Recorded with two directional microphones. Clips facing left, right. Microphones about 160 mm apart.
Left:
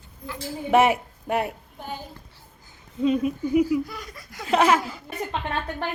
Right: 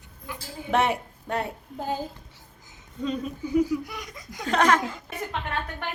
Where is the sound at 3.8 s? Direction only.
20° right (ahead or behind).